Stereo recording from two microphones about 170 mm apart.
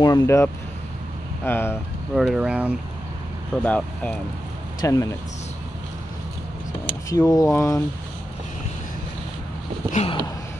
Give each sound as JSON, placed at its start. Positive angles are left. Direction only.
{"t": 0.0, "sound": "speech", "side_deg": 20}
{"t": 2.1, "sound": "speech", "side_deg": -5}
{"t": 3.6, "sound": "speech", "side_deg": 5}
{"t": 4.8, "sound": "speech", "side_deg": 20}
{"t": 7.1, "sound": "speech", "side_deg": 20}
{"t": 9.8, "sound": "a sound", "side_deg": 40}